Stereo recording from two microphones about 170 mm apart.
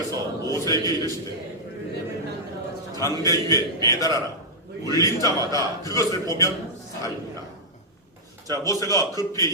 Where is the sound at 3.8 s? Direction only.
20° left (ahead or behind).